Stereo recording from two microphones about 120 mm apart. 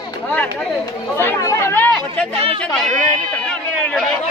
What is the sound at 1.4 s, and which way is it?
Speech, 25° left (ahead or behind).